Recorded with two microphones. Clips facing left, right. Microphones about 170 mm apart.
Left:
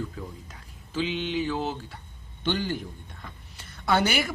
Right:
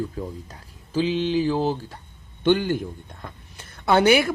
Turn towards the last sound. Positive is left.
turn(degrees=-60)  # may be behind; listen again after turning